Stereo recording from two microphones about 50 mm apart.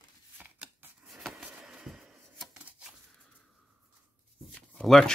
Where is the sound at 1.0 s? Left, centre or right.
Centre.